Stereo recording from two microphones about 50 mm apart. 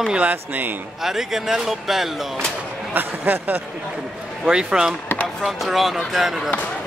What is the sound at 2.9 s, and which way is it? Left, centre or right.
Speech, right.